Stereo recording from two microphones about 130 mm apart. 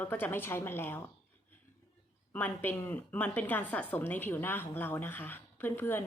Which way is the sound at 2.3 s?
15° left (ahead or behind).